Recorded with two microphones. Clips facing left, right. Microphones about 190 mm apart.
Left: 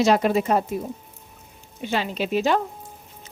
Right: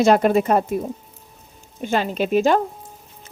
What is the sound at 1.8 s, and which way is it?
Speech, 45° right (ahead or behind).